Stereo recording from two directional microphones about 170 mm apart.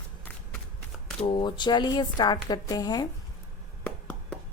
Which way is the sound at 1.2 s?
30° left (ahead or behind).